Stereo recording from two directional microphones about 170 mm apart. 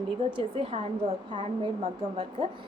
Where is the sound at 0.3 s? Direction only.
35° right (ahead or behind).